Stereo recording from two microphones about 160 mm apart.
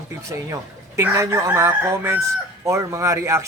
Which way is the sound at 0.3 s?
20° right (ahead or behind).